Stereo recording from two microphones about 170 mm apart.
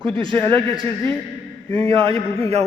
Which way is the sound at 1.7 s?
35° right (ahead or behind).